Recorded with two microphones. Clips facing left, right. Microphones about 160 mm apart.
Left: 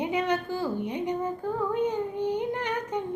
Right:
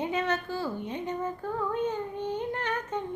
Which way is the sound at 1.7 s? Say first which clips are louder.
Left 3 dB; 15° left (ahead or behind).